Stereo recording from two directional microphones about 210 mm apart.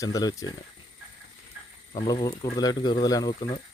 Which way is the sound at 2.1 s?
20° left (ahead or behind).